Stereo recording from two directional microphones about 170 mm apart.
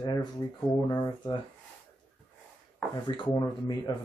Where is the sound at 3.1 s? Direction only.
25° left (ahead or behind).